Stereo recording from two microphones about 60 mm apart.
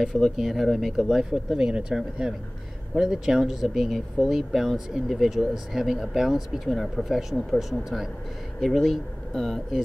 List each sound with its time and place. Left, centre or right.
0.1 s speech: centre